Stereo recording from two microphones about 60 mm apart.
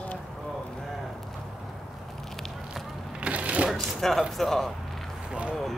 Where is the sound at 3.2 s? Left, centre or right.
Right.